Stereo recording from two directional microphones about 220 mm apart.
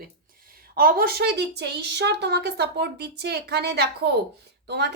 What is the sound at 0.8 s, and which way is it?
A woman's voice, 40° right (ahead or behind).